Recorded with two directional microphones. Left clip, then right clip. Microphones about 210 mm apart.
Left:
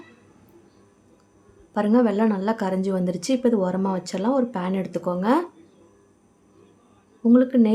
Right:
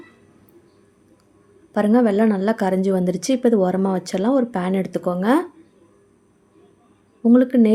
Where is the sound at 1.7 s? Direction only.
20° right (ahead or behind).